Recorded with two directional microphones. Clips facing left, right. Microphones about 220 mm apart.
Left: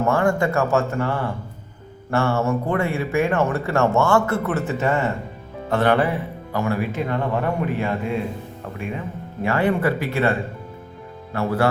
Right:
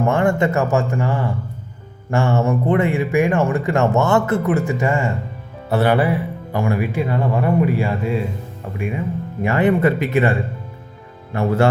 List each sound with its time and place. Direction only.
0.0 s speech: 20° right (ahead or behind)
11.3 s speech: 25° right (ahead or behind)